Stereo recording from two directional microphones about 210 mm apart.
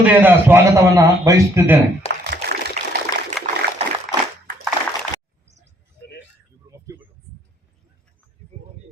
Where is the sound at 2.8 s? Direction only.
35° right (ahead or behind).